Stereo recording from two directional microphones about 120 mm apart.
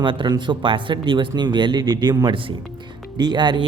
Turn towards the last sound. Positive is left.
turn(degrees=-40)  # may be behind; listen again after turning